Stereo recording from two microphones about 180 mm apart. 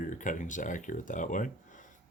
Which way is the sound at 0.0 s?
45° left (ahead or behind).